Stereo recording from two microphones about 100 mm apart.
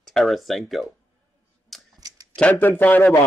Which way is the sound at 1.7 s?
Centre (ahead or behind).